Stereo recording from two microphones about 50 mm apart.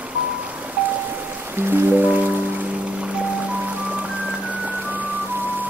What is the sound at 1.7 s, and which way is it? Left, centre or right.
Music, right.